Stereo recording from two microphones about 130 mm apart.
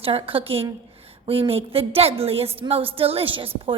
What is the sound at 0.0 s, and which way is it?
A woman's voice, 45° right (ahead or behind).